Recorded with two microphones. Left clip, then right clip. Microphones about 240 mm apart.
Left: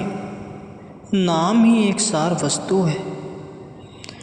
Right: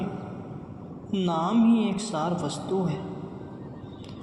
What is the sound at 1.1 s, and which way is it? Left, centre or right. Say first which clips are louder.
A man's voice: left 8 dB; left.